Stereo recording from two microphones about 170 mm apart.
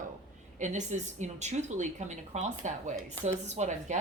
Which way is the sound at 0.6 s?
45° right (ahead or behind).